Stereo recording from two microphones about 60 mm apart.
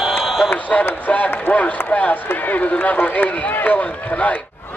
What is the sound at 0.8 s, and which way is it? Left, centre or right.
Run, left.